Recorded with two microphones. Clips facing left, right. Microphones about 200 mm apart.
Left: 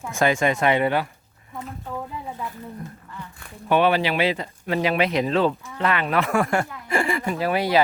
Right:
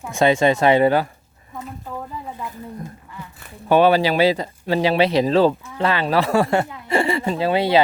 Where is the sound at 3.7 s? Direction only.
35° right (ahead or behind).